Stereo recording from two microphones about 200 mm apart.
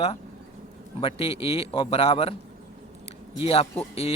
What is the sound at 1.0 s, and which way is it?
Speech, 30° left (ahead or behind).